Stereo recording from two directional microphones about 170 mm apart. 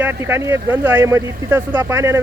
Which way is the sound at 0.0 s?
10° right (ahead or behind).